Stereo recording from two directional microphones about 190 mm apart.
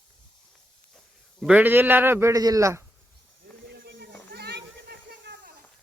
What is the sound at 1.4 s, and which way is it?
A man's voice, 5° right (ahead or behind).